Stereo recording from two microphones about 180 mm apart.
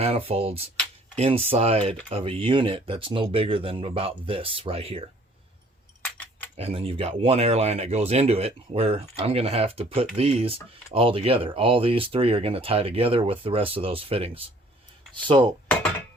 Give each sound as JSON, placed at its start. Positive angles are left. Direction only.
{"t": 0.0, "sound": "speech", "side_deg": -35}
{"t": 6.0, "sound": "keys jangling", "side_deg": 10}
{"t": 6.6, "sound": "speech", "side_deg": -35}
{"t": 15.1, "sound": "dishes", "side_deg": -25}